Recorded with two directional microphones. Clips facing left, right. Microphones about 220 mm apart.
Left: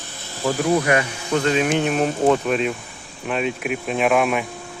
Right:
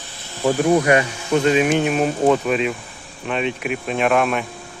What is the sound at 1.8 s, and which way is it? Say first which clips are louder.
Speech: right 1 dB; centre (ahead or behind).